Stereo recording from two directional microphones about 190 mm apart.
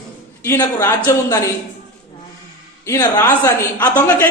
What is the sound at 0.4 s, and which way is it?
Music, 15° left (ahead or behind).